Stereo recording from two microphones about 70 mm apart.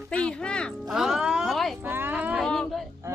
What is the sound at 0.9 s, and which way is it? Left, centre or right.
Speech, centre.